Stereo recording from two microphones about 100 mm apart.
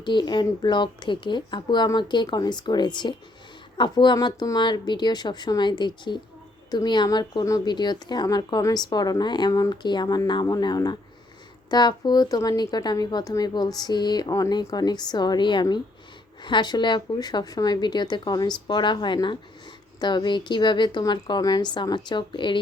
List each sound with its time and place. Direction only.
0.0 s speech: 50° left (ahead or behind)
7.4 s speech: 35° left (ahead or behind)
7.7 s speech: 45° left (ahead or behind)